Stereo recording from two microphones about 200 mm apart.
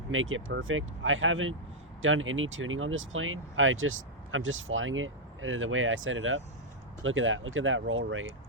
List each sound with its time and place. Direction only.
0.1 s speech: 85° right